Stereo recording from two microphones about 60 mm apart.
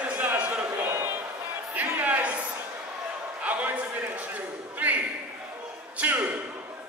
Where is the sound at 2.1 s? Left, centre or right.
Right.